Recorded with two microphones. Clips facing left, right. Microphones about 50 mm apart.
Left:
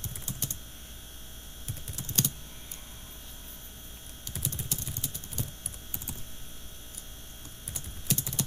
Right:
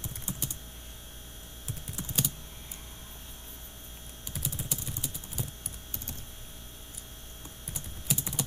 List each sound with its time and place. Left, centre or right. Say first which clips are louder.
0.0 s typing: right 1 dB; centre
2.0 s typing: left 1 dB; centre
4.3 s typing: even; centre
8.1 s typing: left 1 dB; centre